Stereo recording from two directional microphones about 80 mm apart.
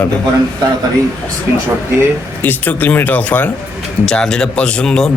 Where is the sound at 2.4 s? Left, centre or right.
Left.